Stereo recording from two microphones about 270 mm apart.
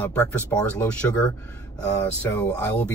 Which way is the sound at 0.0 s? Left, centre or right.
Centre.